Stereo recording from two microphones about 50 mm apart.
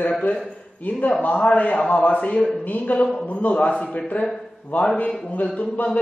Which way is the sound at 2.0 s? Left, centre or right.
Left.